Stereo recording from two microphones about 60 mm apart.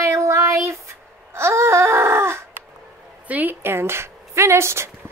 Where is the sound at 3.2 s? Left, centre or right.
Right.